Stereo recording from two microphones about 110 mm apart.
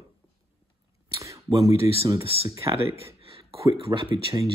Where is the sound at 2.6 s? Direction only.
25° right (ahead or behind).